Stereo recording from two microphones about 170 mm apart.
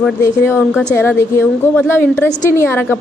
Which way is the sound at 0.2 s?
15° left (ahead or behind).